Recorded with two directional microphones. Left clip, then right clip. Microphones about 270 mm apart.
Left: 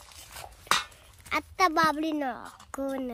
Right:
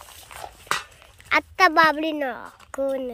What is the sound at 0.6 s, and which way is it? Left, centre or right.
Dog, right.